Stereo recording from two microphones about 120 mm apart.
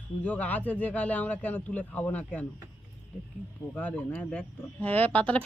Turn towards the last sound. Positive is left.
turn(degrees=10)  # may be behind; listen again after turning